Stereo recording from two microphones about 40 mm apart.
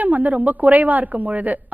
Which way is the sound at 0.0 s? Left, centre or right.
Right.